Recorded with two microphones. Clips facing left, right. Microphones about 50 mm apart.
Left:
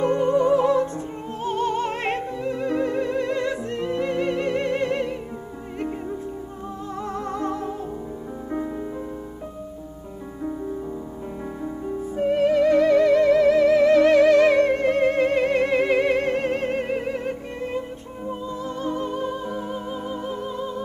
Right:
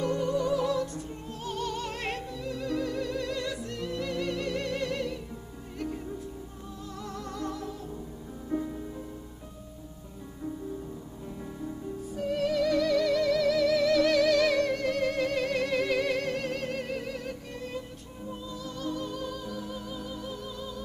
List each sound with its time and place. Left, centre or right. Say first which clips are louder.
0.0 s music: left 9 dB; left
11.6 s music: left 8 dB; left